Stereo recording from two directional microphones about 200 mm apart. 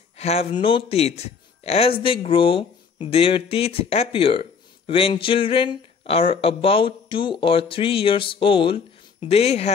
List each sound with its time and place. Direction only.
0.2 s a man's voice: 30° left (ahead or behind)